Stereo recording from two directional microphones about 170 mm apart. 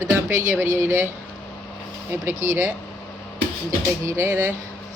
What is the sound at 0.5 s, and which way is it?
Speech, 15° right (ahead or behind).